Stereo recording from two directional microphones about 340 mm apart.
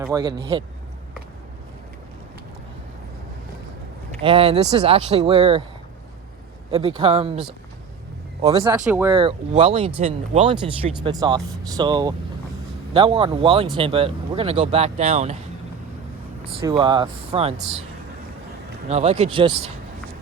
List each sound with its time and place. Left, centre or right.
0.0 s speech: centre
4.2 s speech: centre
6.7 s speech: centre
8.4 s speech: centre
16.5 s speech: centre
18.9 s speech: centre